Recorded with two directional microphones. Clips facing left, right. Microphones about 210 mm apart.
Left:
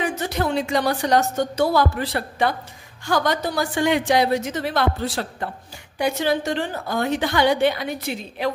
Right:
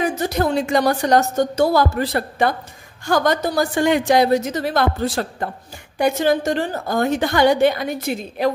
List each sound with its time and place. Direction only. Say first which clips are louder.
0.0 s a woman's voice: right 4 dB; 40° right (ahead or behind)